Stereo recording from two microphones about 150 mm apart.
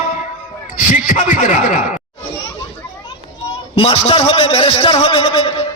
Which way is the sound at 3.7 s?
35° left (ahead or behind).